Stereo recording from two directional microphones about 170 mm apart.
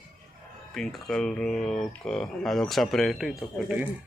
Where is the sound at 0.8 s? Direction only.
Centre (ahead or behind).